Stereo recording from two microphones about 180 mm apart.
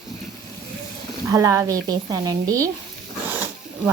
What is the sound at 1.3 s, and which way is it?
Speech, 15° right (ahead or behind).